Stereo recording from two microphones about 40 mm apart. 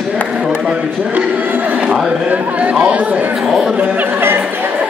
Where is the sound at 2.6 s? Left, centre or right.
Right.